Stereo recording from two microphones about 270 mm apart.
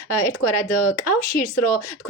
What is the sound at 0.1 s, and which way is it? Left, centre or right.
Speech, left.